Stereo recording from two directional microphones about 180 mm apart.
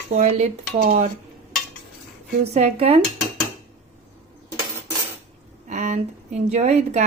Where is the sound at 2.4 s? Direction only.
35° right (ahead or behind).